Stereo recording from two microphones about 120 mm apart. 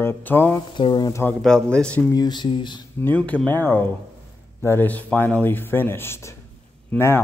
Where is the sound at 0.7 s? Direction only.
40° left (ahead or behind).